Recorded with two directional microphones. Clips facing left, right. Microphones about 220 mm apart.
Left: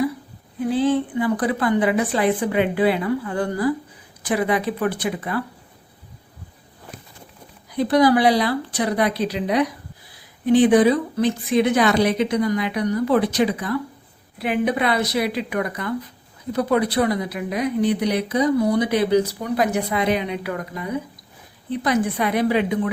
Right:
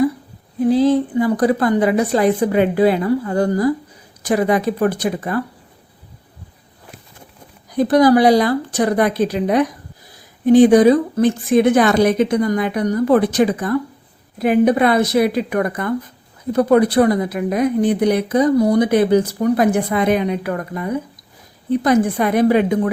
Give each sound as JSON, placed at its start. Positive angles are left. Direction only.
{"t": 0.6, "sound": "a woman's voice", "side_deg": -40}
{"t": 7.7, "sound": "a woman's voice", "side_deg": -45}